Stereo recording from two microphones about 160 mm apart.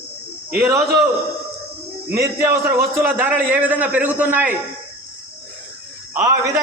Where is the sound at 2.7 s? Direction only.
15° right (ahead or behind).